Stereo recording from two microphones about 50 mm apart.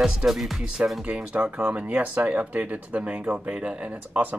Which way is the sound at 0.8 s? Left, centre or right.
Right.